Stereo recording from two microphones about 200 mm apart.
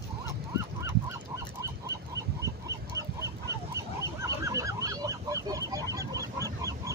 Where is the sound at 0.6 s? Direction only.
15° right (ahead or behind).